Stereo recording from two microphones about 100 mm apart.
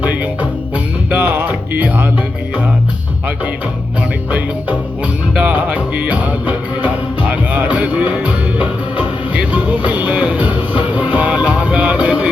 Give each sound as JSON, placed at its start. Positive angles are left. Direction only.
{"t": 1.1, "sound": "music", "side_deg": -20}
{"t": 5.3, "sound": "music", "side_deg": -15}